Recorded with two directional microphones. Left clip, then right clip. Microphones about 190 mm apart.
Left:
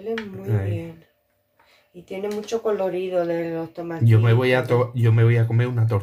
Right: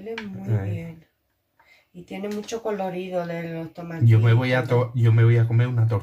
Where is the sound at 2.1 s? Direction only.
25° left (ahead or behind).